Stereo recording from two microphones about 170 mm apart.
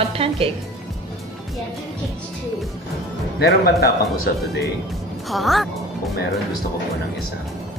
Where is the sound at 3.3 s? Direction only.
70° left (ahead or behind).